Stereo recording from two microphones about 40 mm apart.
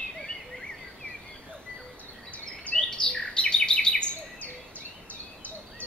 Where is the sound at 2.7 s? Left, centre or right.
Left.